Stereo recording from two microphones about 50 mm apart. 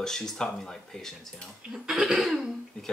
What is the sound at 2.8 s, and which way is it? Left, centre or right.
Speech, centre.